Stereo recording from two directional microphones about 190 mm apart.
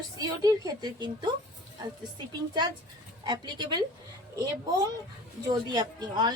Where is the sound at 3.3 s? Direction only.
20° right (ahead or behind).